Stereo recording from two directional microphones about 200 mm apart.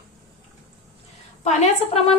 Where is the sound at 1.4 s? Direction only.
35° left (ahead or behind).